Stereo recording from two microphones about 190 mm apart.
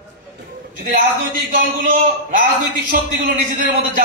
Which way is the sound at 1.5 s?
45° right (ahead or behind).